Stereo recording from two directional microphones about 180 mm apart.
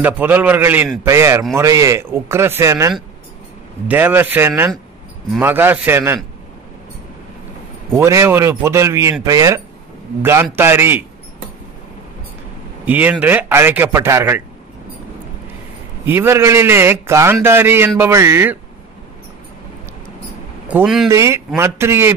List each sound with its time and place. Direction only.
0.0 s a man's voice: 10° right (ahead or behind)
7.9 s a man's voice: 15° right (ahead or behind)
12.8 s a man's voice: 10° right (ahead or behind)
16.1 s a man's voice: 15° right (ahead or behind)
20.6 s speech: 5° right (ahead or behind)
21.1 s a man's voice: 15° right (ahead or behind)